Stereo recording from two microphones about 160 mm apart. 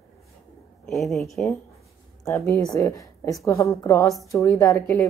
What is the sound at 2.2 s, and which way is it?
A woman's voice, 20° left (ahead or behind).